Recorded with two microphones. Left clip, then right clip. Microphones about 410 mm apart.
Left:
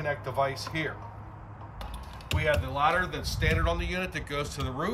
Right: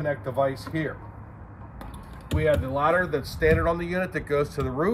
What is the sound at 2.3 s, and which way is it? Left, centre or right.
Speech, centre.